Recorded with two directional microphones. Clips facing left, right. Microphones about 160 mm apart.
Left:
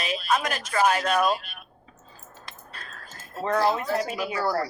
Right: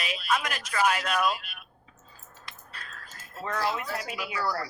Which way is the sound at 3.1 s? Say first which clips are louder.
Left 8 dB; 30° left (ahead or behind).